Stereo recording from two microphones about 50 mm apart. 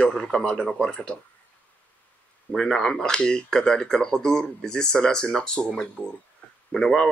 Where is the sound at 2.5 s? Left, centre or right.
Centre.